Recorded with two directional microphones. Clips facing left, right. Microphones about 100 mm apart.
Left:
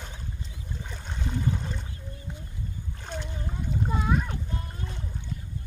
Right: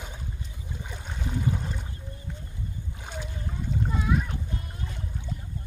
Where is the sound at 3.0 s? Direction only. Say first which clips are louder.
Left 2 dB; 5° right (ahead or behind).